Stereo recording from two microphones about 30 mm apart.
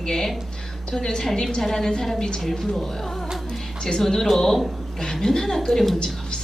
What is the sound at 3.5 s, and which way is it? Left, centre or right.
Music, left.